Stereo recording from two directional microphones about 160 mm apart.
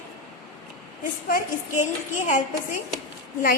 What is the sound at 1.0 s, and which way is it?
Speech, 60° left (ahead or behind).